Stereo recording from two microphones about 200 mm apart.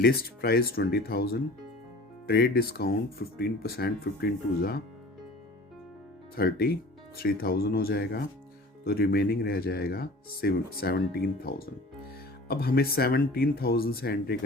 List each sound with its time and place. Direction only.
0.0 s speech: 50° left (ahead or behind)
6.3 s speech: 50° left (ahead or behind)